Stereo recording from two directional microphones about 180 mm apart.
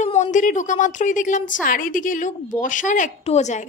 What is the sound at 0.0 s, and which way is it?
A woman's voice, 40° left (ahead or behind).